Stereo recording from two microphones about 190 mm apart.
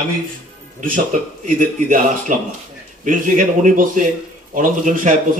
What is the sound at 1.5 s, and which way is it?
A man's voice, 45° right (ahead or behind).